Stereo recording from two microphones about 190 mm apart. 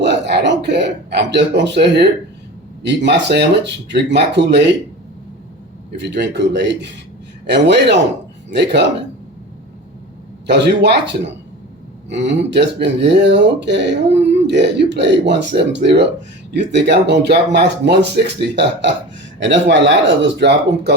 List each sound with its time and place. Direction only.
0.0 s a man's voice: 65° right (ahead or behind)
6.0 s speech: 65° right (ahead or behind)
10.4 s speech: 65° right (ahead or behind)